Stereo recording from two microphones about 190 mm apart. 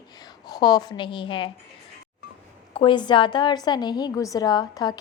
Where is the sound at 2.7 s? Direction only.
25° left (ahead or behind).